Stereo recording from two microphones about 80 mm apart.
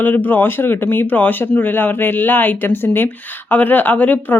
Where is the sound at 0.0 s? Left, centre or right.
Left.